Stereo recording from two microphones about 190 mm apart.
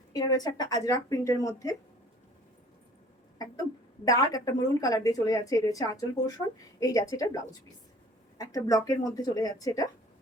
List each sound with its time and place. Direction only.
0.1 s speech: 20° left (ahead or behind)
3.3 s speech: 20° left (ahead or behind)